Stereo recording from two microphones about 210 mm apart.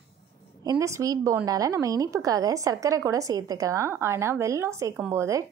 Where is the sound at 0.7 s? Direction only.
15° right (ahead or behind).